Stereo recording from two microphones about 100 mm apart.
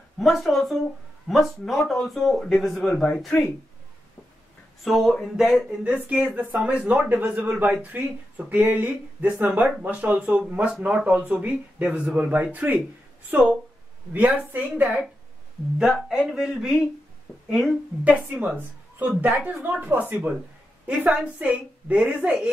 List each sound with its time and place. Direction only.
0.2 s speech: centre (ahead or behind)
4.8 s speech: centre (ahead or behind)
18.0 s speech: 15° right (ahead or behind)